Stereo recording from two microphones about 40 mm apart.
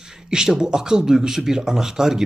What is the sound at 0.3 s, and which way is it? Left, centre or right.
Speech, centre.